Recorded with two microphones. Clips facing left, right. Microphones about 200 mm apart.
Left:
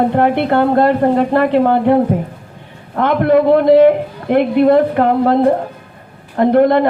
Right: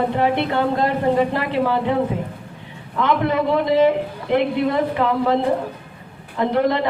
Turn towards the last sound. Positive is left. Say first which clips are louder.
# left 8 dB
turn(degrees=55)  # may be behind; listen again after turning